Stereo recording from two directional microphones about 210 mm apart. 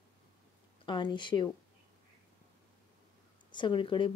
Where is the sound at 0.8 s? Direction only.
20° left (ahead or behind).